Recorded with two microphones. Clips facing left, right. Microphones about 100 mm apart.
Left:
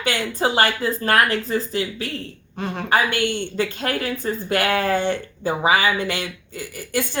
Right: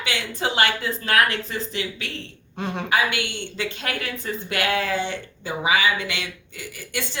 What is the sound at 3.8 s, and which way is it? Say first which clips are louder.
Speech: left 5 dB; 35° left (ahead or behind).